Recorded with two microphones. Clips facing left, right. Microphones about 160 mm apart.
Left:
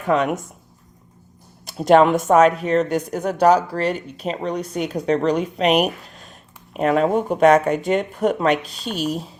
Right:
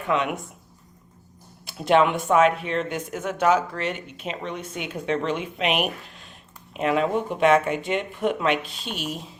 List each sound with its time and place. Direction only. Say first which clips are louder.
0.0 s speech: left 5 dB; 40° left (ahead or behind)
1.6 s speech: left 6 dB; 40° left (ahead or behind)